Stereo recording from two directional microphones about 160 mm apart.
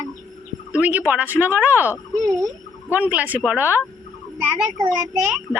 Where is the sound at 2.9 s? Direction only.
10° right (ahead or behind).